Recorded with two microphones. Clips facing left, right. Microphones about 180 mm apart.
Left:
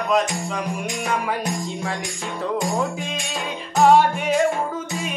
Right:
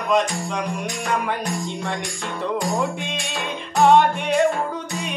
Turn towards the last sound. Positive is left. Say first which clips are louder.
# even
turn(degrees=5)  # may be behind; listen again after turning